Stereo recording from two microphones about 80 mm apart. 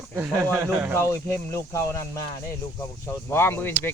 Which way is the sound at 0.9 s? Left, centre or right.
Left.